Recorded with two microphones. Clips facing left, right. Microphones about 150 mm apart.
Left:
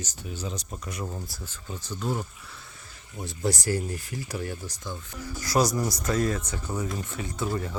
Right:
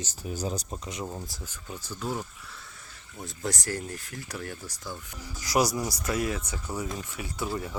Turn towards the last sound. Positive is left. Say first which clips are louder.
# left 2 dB
turn(degrees=-10)  # may be behind; listen again after turning